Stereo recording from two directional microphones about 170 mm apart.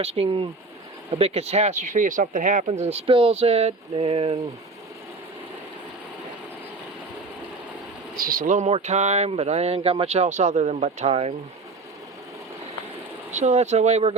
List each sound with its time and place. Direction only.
0.0 s speech: 35° right (ahead or behind); by 2.6 s 50° right (ahead or behind)
2.6 s speech: 40° right (ahead or behind)
8.1 s speech: 55° right (ahead or behind); by 11.3 s 40° right (ahead or behind)
13.3 s speech: 40° right (ahead or behind)